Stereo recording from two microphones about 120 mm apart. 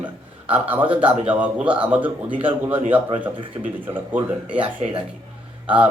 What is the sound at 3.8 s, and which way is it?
Speech, 15° right (ahead or behind).